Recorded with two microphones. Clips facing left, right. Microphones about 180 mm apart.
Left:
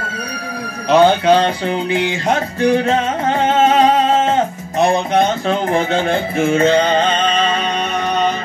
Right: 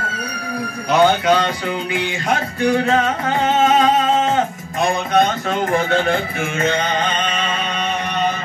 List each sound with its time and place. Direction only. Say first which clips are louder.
0.9 s music: left 4 dB; 30° left (ahead or behind)
4.7 s speech: left 3 dB; 30° left (ahead or behind)
5.7 s music: right 1 dB; 25° left (ahead or behind)